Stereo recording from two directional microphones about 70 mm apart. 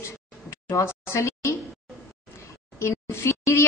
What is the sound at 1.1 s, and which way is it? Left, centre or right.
Speech, left.